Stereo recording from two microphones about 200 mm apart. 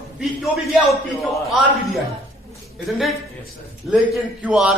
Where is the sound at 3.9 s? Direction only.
5° right (ahead or behind).